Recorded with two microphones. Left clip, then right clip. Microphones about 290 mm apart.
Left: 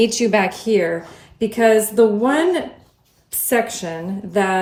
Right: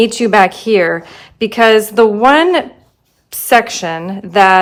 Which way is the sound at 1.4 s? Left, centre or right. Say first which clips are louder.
Right 6 dB; right.